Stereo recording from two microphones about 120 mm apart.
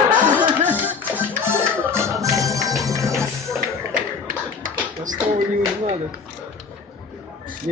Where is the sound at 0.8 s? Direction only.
15° right (ahead or behind).